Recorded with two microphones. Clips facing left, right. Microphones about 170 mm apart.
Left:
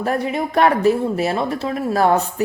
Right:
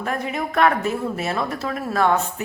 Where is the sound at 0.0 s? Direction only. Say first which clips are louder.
Left 5 dB; 35° left (ahead or behind).